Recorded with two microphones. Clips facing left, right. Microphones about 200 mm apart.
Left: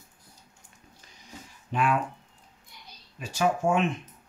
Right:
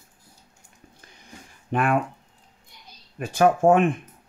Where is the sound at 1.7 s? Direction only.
55° right (ahead or behind).